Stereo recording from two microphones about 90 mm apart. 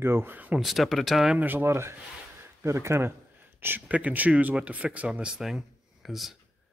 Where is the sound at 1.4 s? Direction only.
25° right (ahead or behind).